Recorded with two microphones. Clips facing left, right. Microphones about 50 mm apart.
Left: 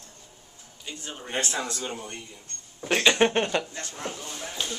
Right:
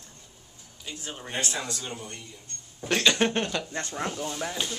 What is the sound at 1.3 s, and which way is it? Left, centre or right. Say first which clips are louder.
Speech: left 2 dB; left.